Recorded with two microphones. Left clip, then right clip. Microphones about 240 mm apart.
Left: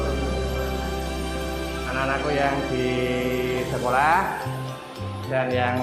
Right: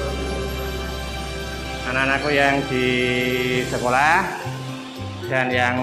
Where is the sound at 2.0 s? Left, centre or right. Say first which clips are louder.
Right 5 dB; right.